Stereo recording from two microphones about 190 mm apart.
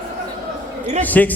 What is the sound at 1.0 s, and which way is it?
Speech, 10° left (ahead or behind).